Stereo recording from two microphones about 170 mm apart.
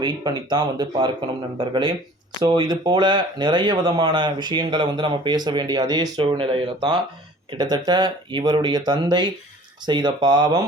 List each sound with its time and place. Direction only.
0.0 s speech: 25° right (ahead or behind)